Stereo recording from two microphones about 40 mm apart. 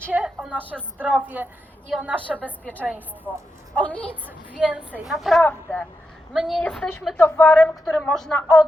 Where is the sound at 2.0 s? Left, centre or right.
Right.